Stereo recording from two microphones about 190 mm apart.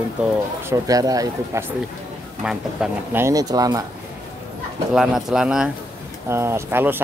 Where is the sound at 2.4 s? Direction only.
5° right (ahead or behind).